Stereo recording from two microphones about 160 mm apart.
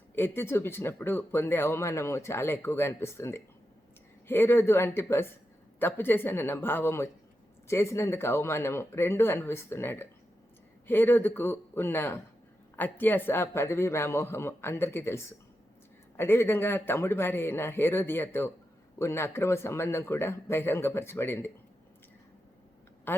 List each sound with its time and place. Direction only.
0.2 s speech: 15° left (ahead or behind)
23.1 s speech: 10° left (ahead or behind)